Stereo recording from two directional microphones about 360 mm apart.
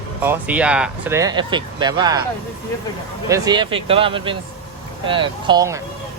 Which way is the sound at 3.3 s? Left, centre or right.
Centre.